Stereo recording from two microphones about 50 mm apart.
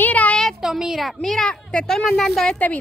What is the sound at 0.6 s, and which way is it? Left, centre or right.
Speech, centre.